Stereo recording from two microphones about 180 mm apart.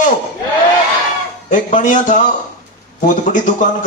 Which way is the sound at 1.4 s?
45° left (ahead or behind).